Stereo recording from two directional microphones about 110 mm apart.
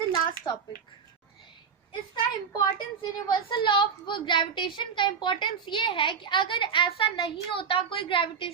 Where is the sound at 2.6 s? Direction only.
45° left (ahead or behind).